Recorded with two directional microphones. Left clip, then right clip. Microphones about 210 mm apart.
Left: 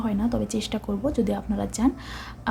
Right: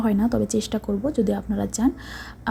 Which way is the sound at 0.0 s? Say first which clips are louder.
Right 4 dB; 25° right (ahead or behind).